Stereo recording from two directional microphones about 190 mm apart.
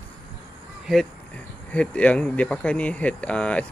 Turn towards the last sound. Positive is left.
turn(degrees=5)  # may be behind; listen again after turning